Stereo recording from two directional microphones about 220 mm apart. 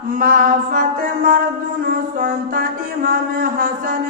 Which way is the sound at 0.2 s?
40° right (ahead or behind).